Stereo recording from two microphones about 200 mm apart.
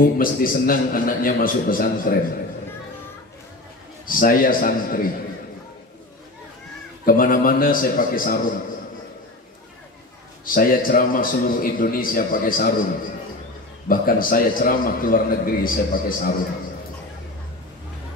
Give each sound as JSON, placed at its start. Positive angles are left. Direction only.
{"t": 0.0, "sound": "a man's voice", "side_deg": 45}
{"t": 4.0, "sound": "a man's voice", "side_deg": 45}
{"t": 7.1, "sound": "a man's voice", "side_deg": 45}
{"t": 10.4, "sound": "a man's voice", "side_deg": 45}
{"t": 13.8, "sound": "a man's voice", "side_deg": 45}